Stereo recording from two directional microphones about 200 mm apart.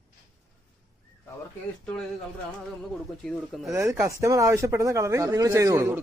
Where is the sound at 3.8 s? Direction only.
15° right (ahead or behind).